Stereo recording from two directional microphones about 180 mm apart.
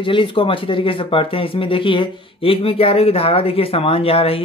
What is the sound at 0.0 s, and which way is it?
Speech, 30° left (ahead or behind).